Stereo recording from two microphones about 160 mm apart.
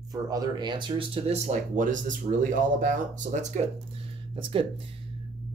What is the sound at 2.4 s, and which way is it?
Speech, 55° right (ahead or behind).